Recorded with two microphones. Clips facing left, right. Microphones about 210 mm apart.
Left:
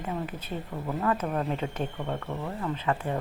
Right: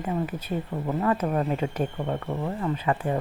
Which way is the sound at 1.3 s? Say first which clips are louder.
Right 4 dB; 10° right (ahead or behind).